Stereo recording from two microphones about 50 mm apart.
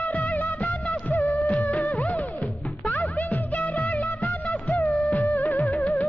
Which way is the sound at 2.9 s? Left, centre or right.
Left.